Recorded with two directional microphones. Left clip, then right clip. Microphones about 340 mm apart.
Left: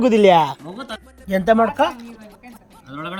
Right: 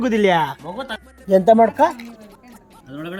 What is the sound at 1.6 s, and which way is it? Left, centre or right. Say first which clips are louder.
Speech: right 3 dB; centre.